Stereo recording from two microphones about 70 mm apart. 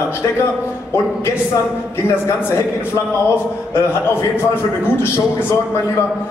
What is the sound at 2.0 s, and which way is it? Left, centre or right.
Speech, left.